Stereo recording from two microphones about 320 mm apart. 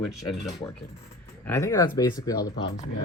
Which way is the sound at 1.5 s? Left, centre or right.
Centre.